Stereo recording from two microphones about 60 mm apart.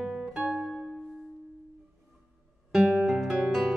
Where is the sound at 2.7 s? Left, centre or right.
Centre.